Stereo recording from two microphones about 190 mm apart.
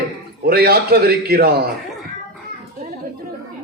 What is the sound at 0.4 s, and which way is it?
A woman's voice, 55° right (ahead or behind).